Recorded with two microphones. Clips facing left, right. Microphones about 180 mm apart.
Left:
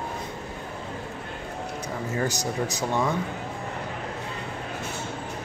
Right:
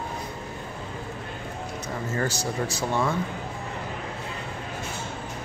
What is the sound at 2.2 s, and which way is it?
Speech, 15° left (ahead or behind).